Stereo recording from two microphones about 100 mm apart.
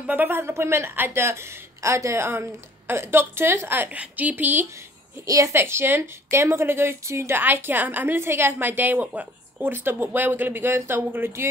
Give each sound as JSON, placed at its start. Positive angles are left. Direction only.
{"t": 0.0, "sound": "a woman's voice", "side_deg": -20}
{"t": 5.2, "sound": "a woman's voice", "side_deg": -35}